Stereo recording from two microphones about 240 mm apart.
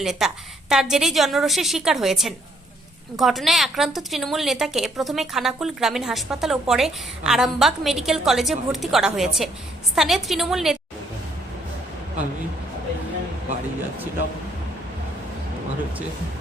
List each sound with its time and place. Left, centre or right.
0.0 s a woman's voice: centre